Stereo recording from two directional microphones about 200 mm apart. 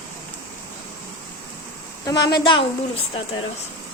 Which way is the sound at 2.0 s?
20° left (ahead or behind).